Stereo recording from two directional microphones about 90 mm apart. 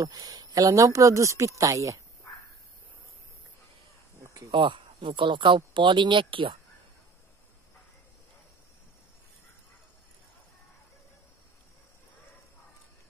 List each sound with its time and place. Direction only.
0.0 s speech: 45° right (ahead or behind)
4.2 s a sound: 35° right (ahead or behind)
4.5 s speech: 65° right (ahead or behind)